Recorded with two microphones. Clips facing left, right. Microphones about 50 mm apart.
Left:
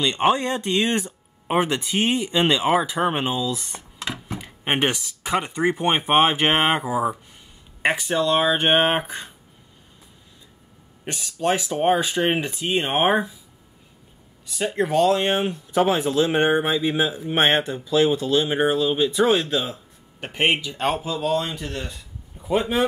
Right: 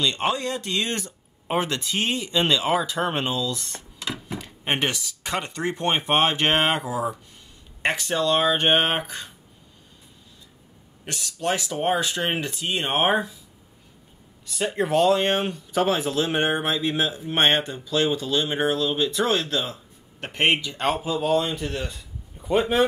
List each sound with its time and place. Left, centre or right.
0.3 s speech: left
7.8 s speech: centre
11.1 s speech: centre
14.5 s a man's voice: centre
21.0 s a man's voice: centre